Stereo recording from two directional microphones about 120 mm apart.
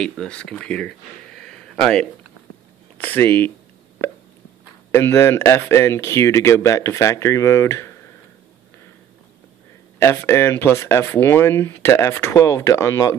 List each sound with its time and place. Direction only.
0.0 s speech: 10° left (ahead or behind)
3.0 s speech: 15° left (ahead or behind)
4.9 s speech: 20° left (ahead or behind)
9.9 s speech: 20° left (ahead or behind)